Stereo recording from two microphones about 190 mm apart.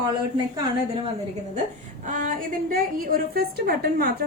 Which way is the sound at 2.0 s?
45° right (ahead or behind).